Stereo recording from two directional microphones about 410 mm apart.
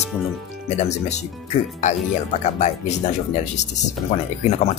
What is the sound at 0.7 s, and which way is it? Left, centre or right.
Speech, centre.